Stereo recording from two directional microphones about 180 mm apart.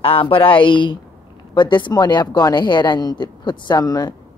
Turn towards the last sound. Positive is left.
turn(degrees=20)  # may be behind; listen again after turning